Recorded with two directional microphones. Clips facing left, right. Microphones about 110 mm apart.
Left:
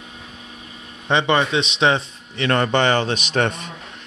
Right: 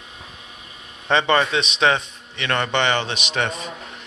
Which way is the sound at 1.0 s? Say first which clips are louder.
Even; 20° left (ahead or behind).